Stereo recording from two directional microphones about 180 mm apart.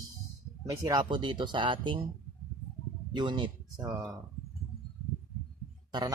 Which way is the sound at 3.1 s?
25° right (ahead or behind).